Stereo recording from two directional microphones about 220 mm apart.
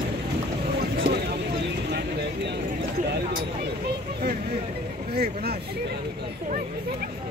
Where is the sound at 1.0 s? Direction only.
45° right (ahead or behind).